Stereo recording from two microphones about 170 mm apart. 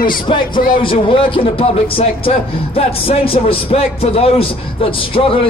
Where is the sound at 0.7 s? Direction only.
30° left (ahead or behind).